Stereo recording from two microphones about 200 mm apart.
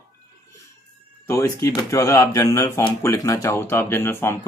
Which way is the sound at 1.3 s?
15° left (ahead or behind).